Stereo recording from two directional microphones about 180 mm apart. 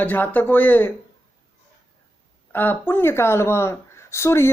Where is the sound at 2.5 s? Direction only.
10° left (ahead or behind).